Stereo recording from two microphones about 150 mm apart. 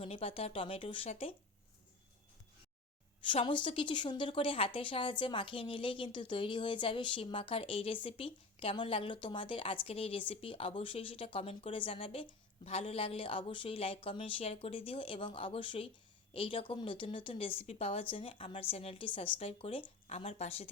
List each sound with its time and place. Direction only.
0.0 s speech: 40° left (ahead or behind)
3.2 s speech: 35° left (ahead or behind)